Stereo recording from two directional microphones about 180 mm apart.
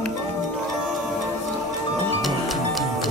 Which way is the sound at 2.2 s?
Centre (ahead or behind).